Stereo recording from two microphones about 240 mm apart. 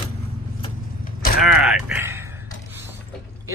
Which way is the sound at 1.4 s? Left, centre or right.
Centre.